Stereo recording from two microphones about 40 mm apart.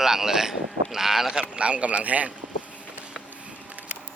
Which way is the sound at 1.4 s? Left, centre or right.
Right.